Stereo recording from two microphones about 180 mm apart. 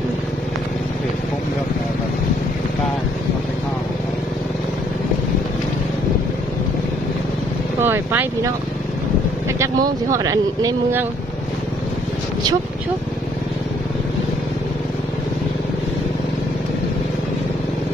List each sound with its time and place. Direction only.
7.8 s speech: 10° right (ahead or behind)
9.6 s speech: 20° right (ahead or behind)